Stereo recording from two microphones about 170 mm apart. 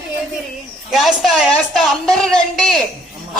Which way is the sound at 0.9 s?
Centre (ahead or behind).